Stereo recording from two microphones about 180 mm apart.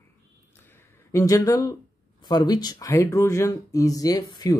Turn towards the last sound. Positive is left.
turn(degrees=20)  # may be behind; listen again after turning